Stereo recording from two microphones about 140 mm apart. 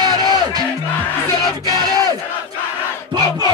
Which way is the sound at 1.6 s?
30° right (ahead or behind).